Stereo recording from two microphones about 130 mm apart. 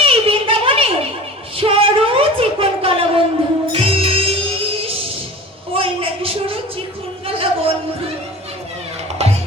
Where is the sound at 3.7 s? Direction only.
45° right (ahead or behind).